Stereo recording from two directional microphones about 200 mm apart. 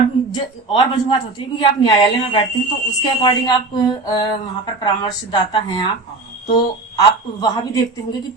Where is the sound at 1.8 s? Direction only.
25° left (ahead or behind).